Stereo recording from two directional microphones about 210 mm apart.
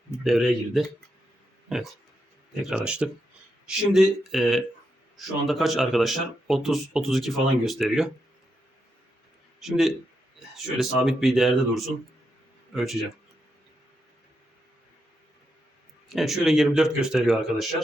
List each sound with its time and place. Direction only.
0.3 s speech: centre (ahead or behind)
2.6 s speech: 5° right (ahead or behind)
9.6 s a man's voice: centre (ahead or behind)
16.0 s speech: centre (ahead or behind)